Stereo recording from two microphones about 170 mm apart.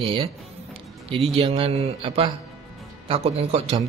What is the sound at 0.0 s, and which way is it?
Speech, 35° right (ahead or behind).